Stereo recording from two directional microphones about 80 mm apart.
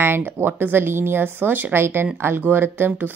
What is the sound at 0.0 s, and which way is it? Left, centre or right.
Speech, right.